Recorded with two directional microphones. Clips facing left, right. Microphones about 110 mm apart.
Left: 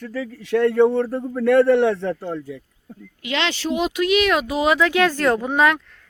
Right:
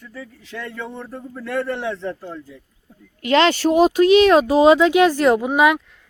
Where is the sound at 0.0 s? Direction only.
90° left; by 2.6 s 65° left (ahead or behind).